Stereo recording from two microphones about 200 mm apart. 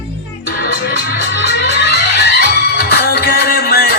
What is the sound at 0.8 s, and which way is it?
Music, 55° left (ahead or behind).